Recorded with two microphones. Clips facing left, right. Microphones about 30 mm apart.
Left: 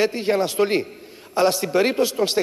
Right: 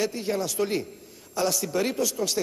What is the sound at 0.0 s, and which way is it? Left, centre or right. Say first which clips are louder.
A man's voice: left 7 dB; left.